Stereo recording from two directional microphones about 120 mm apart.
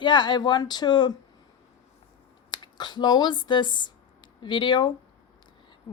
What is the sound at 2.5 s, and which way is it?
Speech, 35° left (ahead or behind).